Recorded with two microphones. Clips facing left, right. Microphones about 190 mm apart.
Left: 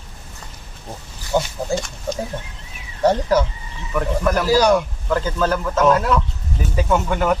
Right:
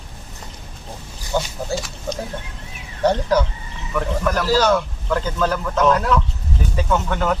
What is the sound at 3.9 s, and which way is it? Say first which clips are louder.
A man's voice: left 2 dB; 10° left (ahead or behind).